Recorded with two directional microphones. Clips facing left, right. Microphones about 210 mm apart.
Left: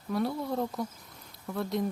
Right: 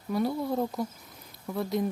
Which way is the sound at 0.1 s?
Centre (ahead or behind).